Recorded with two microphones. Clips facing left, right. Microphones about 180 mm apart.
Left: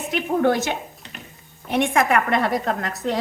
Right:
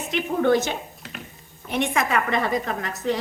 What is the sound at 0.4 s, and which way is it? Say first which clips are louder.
A woman's voice: even; 60° left (ahead or behind).